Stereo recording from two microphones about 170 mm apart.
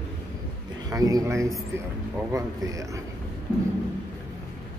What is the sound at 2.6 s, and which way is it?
Speech, 20° right (ahead or behind).